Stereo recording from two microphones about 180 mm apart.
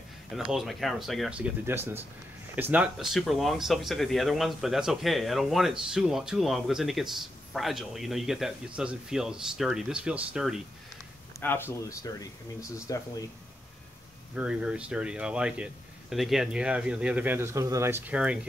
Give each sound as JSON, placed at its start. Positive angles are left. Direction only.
{"t": 0.5, "sound": "speech", "side_deg": 0}
{"t": 11.3, "sound": "speech", "side_deg": 10}
{"t": 14.3, "sound": "speech", "side_deg": -5}